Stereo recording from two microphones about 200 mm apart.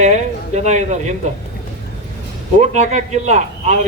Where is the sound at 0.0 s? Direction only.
35° right (ahead or behind).